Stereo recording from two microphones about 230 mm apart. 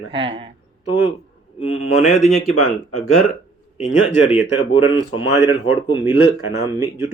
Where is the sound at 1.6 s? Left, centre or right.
Left.